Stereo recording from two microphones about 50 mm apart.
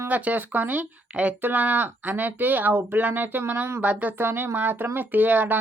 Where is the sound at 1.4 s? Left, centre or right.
Right.